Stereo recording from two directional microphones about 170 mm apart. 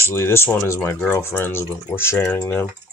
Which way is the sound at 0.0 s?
15° left (ahead or behind).